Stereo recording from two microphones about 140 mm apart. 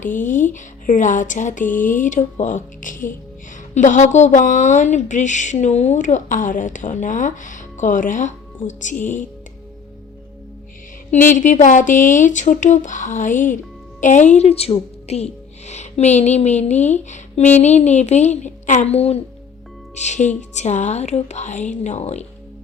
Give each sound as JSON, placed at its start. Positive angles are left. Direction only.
{"t": 0.0, "sound": "speech", "side_deg": 65}
{"t": 3.8, "sound": "speech", "side_deg": 60}
{"t": 11.1, "sound": "a woman's voice", "side_deg": 65}